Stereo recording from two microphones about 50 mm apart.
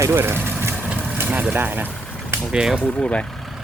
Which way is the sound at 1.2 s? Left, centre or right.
Right.